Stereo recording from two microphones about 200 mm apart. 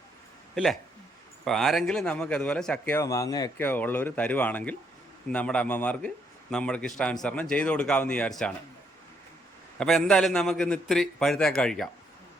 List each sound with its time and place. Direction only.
0.5 s a man's voice: centre (ahead or behind)
9.7 s a man's voice: centre (ahead or behind)